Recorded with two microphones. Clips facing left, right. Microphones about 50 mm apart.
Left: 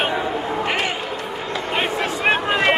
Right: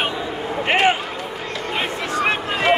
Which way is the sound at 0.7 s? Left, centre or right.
Right.